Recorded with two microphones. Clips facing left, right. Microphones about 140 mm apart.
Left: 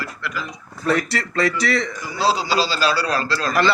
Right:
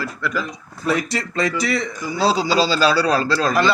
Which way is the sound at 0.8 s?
15° right (ahead or behind).